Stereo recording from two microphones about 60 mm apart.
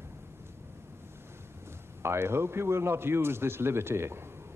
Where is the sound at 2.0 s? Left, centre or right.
Right.